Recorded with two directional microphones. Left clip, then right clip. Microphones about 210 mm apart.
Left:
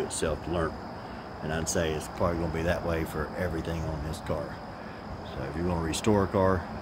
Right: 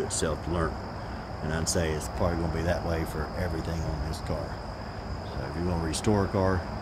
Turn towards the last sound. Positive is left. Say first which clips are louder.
# left 2 dB
turn(degrees=25)  # may be behind; listen again after turning